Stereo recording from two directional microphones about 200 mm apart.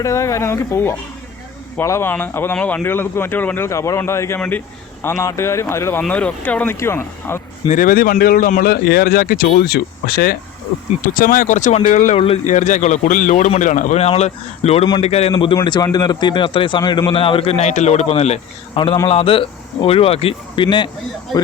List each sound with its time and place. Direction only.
0.0 s speech: 15° left (ahead or behind)
7.7 s a man's voice: 45° left (ahead or behind); by 20.9 s 25° left (ahead or behind)